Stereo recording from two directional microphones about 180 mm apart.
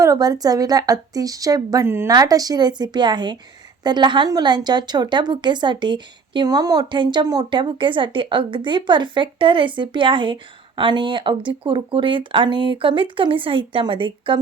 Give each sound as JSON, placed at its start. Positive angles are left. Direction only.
{"t": 0.0, "sound": "a woman's voice", "side_deg": -20}